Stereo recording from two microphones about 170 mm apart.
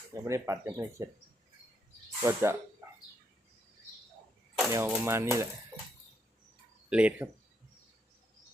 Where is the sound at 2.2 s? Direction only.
15° right (ahead or behind).